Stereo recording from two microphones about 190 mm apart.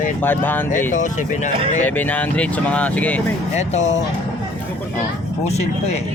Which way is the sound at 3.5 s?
35° left (ahead or behind).